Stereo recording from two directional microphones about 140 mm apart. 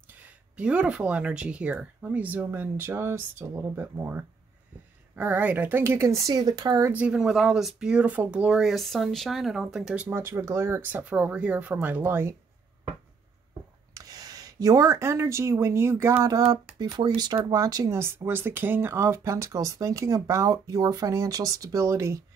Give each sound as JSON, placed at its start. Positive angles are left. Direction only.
{"t": 0.1, "sound": "speech", "side_deg": -10}
{"t": 6.9, "sound": "speech", "side_deg": -10}
{"t": 10.0, "sound": "speech", "side_deg": -15}
{"t": 13.9, "sound": "speech", "side_deg": -25}